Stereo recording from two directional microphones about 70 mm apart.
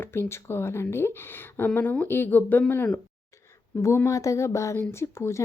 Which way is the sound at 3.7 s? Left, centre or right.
Left.